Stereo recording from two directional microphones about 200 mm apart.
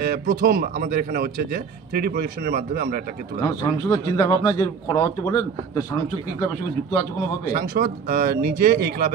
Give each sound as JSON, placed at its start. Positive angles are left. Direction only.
{"t": 0.0, "sound": "speech", "side_deg": -45}
{"t": 3.8, "sound": "a man's voice", "side_deg": 15}
{"t": 7.5, "sound": "speech", "side_deg": -45}